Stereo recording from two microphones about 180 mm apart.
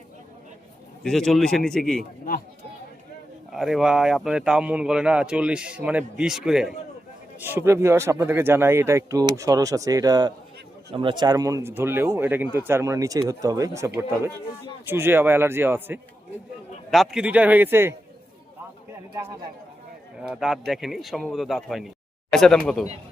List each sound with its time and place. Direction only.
1.0 s speech: 5° left (ahead or behind)
3.5 s speech: centre (ahead or behind)
16.9 s speech: centre (ahead or behind)
20.2 s speech: 5° right (ahead or behind)